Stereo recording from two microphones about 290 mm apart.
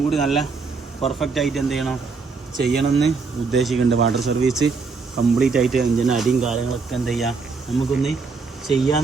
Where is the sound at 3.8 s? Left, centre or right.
Right.